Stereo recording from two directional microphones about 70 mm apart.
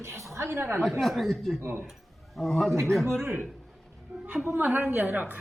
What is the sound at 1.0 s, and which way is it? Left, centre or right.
Speech, centre.